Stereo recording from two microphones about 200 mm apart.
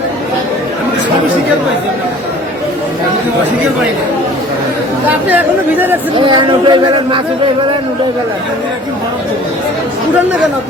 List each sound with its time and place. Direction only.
5.3 s speech: 10° right (ahead or behind)
6.1 s speech: 25° right (ahead or behind)